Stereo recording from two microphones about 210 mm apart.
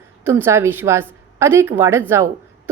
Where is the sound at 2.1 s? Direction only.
10° right (ahead or behind).